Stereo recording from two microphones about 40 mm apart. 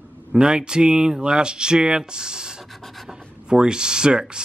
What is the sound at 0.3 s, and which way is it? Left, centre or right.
Speech, centre.